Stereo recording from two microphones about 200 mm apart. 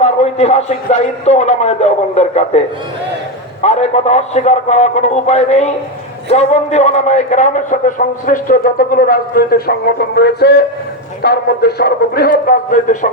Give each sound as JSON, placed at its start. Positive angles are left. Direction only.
{"t": 0.0, "sound": "a man's voice", "side_deg": 30}